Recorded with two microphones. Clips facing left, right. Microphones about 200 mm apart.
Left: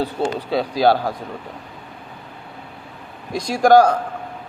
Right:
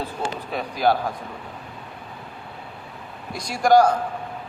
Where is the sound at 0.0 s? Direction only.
85° left.